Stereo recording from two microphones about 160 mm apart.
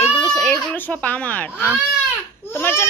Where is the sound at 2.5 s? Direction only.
15° left (ahead or behind).